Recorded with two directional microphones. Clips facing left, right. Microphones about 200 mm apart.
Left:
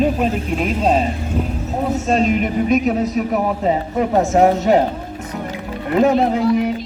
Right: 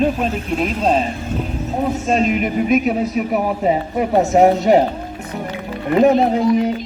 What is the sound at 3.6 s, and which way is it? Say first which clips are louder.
Speech: even; 15° right (ahead or behind).